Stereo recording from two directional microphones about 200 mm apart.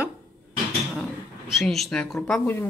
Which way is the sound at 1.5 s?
Centre (ahead or behind).